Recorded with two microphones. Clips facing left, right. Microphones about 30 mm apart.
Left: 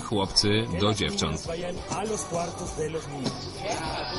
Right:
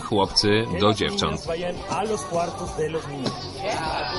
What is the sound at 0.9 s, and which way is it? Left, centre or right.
Speech, right.